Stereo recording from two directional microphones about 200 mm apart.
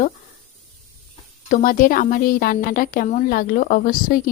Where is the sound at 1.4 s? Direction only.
40° left (ahead or behind).